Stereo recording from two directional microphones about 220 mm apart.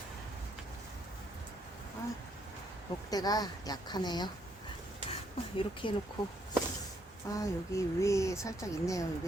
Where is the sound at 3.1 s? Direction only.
15° left (ahead or behind).